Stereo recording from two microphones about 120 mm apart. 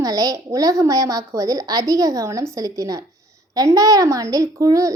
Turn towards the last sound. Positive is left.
turn(degrees=-30)  # may be behind; listen again after turning